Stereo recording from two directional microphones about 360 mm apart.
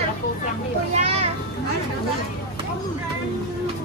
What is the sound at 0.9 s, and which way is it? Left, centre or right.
Children playing, centre.